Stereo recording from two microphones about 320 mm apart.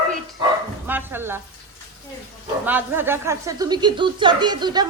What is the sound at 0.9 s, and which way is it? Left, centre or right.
Stir, centre.